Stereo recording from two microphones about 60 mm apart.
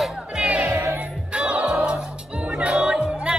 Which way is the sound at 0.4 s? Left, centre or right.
Centre.